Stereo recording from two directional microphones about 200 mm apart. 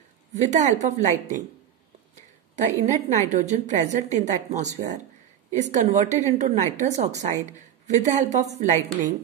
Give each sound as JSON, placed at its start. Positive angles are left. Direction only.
{"t": 0.3, "sound": "a woman's voice", "side_deg": -35}
{"t": 2.5, "sound": "a woman's voice", "side_deg": -35}